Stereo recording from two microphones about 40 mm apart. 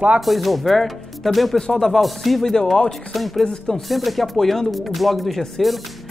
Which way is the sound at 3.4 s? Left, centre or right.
Centre.